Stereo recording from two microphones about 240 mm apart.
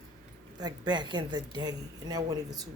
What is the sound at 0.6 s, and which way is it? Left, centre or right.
Speech, centre.